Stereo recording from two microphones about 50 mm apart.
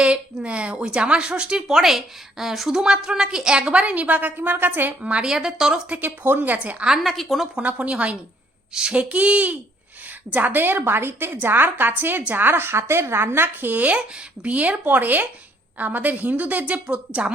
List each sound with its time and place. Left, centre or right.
0.0 s a woman's voice: right
4.4 s a woman's voice: right
5.0 s speech: right
5.3 s a woman's voice: centre
6.0 s a woman's voice: right
7.0 s a woman's voice: centre
7.5 s a woman's voice: right
10.3 s a woman's voice: right